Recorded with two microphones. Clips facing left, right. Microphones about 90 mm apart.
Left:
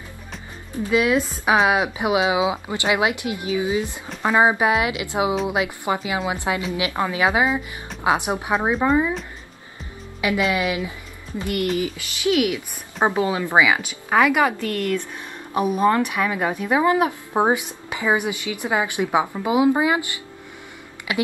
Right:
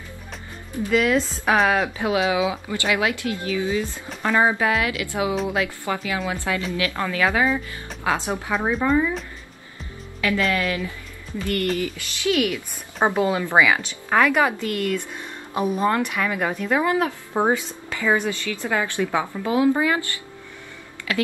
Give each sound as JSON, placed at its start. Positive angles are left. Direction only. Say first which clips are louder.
{"t": 0.8, "sound": "a woman's voice", "louder": "left 1 dB", "side_deg": 10}
{"t": 10.4, "sound": "a woman's voice", "louder": "left 1 dB", "side_deg": 15}
{"t": 14.7, "sound": "speech", "louder": "left 1 dB", "side_deg": -10}
{"t": 15.1, "sound": "a woman's voice", "louder": "left 2 dB", "side_deg": 10}